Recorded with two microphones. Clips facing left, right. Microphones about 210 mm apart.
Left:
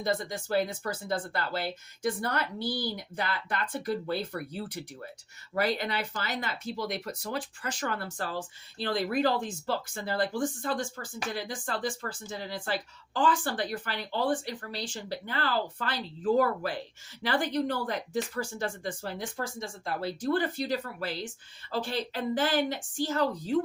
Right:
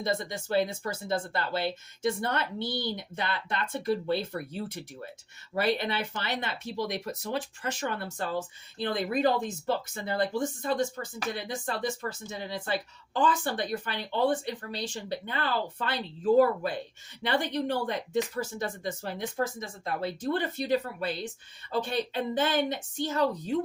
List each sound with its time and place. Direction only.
0.0 s speech: 25° right (ahead or behind)